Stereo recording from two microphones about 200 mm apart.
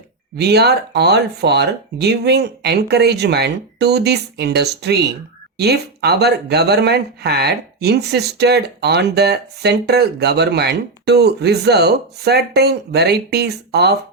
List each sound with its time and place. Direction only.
0.3 s speech: 55° right (ahead or behind)